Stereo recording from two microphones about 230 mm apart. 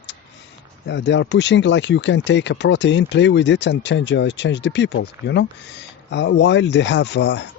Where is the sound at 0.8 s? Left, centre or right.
Left.